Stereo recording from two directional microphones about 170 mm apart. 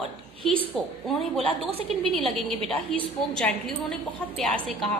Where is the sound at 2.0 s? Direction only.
Centre (ahead or behind).